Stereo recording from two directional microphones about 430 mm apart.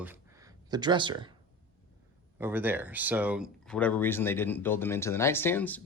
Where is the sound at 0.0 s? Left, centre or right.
Centre.